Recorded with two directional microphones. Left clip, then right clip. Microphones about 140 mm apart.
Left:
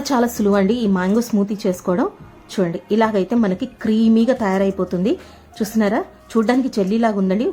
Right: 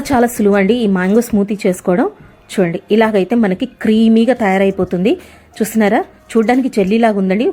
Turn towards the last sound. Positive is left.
turn(degrees=-10)  # may be behind; listen again after turning